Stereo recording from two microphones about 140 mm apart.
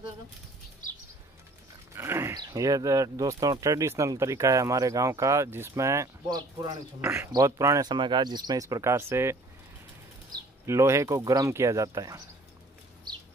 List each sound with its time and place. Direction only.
2.0 s speech: 20° right (ahead or behind)
7.0 s speech: 20° right (ahead or behind)